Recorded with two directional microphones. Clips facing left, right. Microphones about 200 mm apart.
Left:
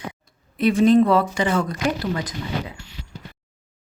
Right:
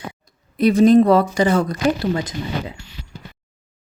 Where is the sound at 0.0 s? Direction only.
35° right (ahead or behind).